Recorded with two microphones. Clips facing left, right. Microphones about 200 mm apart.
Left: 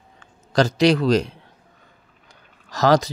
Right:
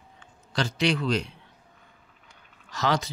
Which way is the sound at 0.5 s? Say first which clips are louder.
Left 9 dB; 40° left (ahead or behind).